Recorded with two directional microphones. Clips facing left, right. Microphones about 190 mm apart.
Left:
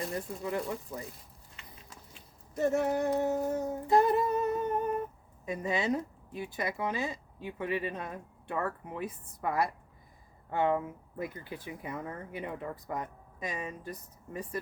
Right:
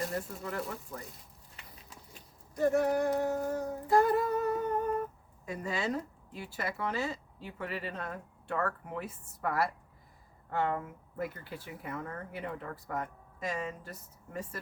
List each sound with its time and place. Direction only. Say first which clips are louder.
0.4 s speech: left 4 dB; 15° left (ahead or behind)
2.6 s humming: right 1 dB; 25° left (ahead or behind)
5.5 s speech: left 3 dB; 20° left (ahead or behind)